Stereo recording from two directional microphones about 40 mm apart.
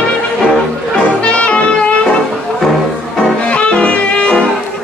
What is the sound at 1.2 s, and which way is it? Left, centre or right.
Music, left.